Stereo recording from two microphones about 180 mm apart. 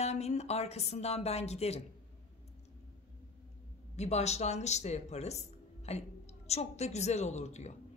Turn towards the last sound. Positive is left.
turn(degrees=40)  # may be behind; listen again after turning